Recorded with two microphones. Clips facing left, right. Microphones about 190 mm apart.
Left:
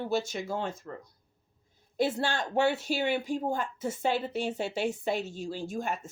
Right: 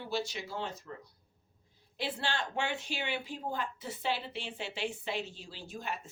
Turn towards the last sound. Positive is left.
turn(degrees=45)  # may be behind; listen again after turning